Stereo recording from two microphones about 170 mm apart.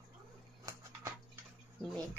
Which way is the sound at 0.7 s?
20° right (ahead or behind).